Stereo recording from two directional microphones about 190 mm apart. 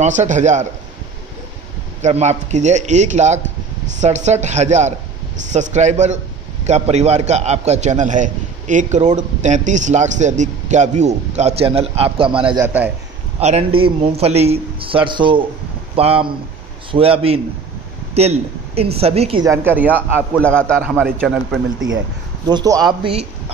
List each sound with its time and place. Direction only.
0.0 s a man's voice: 40° right (ahead or behind)
2.0 s a man's voice: 35° right (ahead or behind)
12.6 s speech: 10° right (ahead or behind)
13.4 s a man's voice: 35° right (ahead or behind)
19.4 s speech: 15° right (ahead or behind)
20.3 s a man's voice: 5° left (ahead or behind)
20.8 s speech: 10° right (ahead or behind)
22.5 s speech: 20° right (ahead or behind)